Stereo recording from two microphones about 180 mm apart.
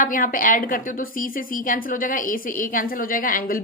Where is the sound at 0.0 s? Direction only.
50° left (ahead or behind).